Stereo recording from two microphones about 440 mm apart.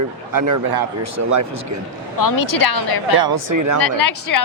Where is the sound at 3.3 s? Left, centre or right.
Right.